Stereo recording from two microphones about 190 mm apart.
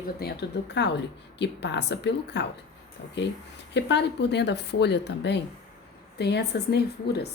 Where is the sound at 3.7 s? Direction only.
65° left (ahead or behind).